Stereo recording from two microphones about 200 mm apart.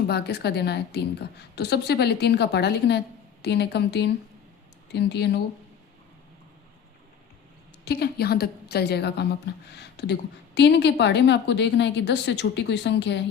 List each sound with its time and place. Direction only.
0.1 s a woman's voice: 55° left (ahead or behind)
7.9 s a woman's voice: 55° left (ahead or behind)